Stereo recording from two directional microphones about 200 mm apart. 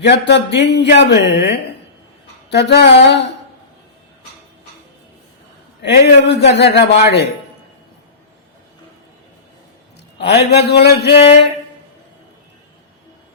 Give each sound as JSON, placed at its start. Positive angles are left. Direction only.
{"t": 0.0, "sound": "speech", "side_deg": 60}
{"t": 5.8, "sound": "speech", "side_deg": 55}
{"t": 10.2, "sound": "speech", "side_deg": 55}
{"t": 11.1, "sound": "music", "side_deg": 30}